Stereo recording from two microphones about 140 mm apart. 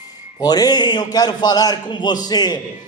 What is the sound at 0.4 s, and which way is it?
A man's voice, 30° left (ahead or behind).